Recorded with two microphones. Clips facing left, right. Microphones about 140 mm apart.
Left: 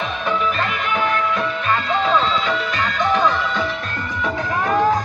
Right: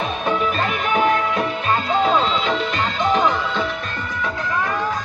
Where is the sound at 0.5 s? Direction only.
20° right (ahead or behind).